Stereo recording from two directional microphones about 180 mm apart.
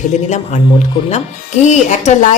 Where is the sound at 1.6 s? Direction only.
40° left (ahead or behind).